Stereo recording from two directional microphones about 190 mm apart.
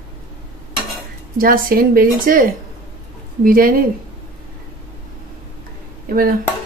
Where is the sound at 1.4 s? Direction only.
50° right (ahead or behind).